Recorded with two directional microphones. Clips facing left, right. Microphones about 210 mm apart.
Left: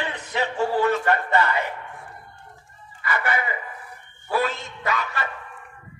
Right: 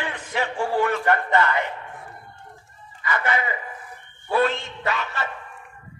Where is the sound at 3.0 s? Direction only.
25° right (ahead or behind).